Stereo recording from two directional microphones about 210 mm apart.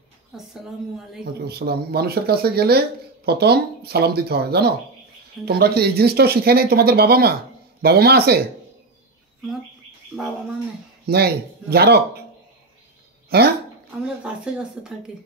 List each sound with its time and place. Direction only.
0.5 s speech: centre (ahead or behind)
1.4 s speech: 50° right (ahead or behind)
11.1 s speech: 50° right (ahead or behind)
13.3 s speech: 45° right (ahead or behind)
14.0 s speech: 5° right (ahead or behind)